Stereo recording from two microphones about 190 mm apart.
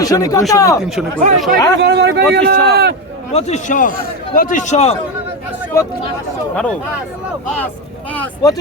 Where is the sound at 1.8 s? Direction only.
65° right (ahead or behind).